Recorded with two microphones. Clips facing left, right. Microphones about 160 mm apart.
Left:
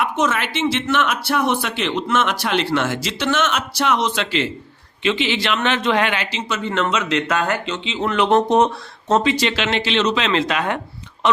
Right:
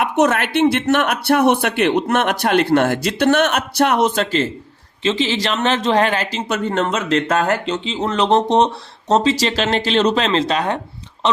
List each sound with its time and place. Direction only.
0.0 s a man's voice: 60° right (ahead or behind); by 10.8 s 30° right (ahead or behind)